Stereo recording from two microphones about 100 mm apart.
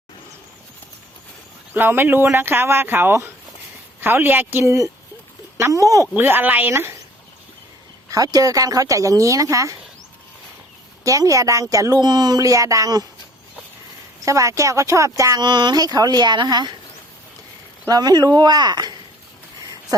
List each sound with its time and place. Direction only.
1.7 s speech: 20° right (ahead or behind)
4.6 s speech: 30° right (ahead or behind)
6.1 s speech: 20° right (ahead or behind)
8.1 s speech: 40° right (ahead or behind)
11.0 s speech: 35° right (ahead or behind)
14.3 s speech: 30° right (ahead or behind)
15.4 s speech: 50° right (ahead or behind)
17.8 s speech: 40° right (ahead or behind)